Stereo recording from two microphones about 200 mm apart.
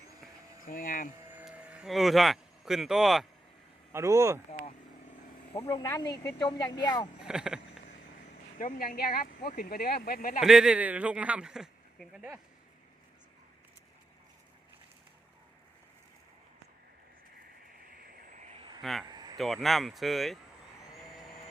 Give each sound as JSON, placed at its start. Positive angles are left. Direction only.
{"t": 0.6, "sound": "speech", "side_deg": 45}
{"t": 1.2, "sound": "a sound", "side_deg": -10}
{"t": 3.9, "sound": "speech", "side_deg": -15}
{"t": 5.6, "sound": "speech", "side_deg": 15}
{"t": 7.3, "sound": "speech", "side_deg": -5}
{"t": 8.5, "sound": "speech", "side_deg": 40}
{"t": 10.4, "sound": "speech", "side_deg": -5}
{"t": 17.9, "sound": "vehicle", "side_deg": -50}
{"t": 18.4, "sound": "a sound", "side_deg": -25}
{"t": 18.8, "sound": "speech", "side_deg": 0}
{"t": 19.1, "sound": "a sound", "side_deg": -20}
{"t": 19.4, "sound": "speech", "side_deg": 0}
{"t": 20.9, "sound": "vehicle", "side_deg": 0}